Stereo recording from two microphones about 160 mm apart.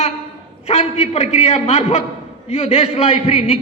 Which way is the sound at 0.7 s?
40° left (ahead or behind).